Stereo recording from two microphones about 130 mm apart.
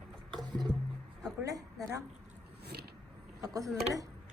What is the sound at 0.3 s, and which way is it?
Music, 30° right (ahead or behind).